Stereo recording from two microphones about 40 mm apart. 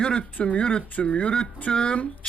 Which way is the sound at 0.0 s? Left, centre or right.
Left.